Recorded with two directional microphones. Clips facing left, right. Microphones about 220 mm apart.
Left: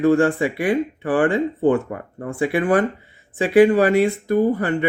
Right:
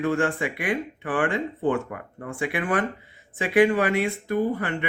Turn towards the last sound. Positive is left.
turn(degrees=40)  # may be behind; listen again after turning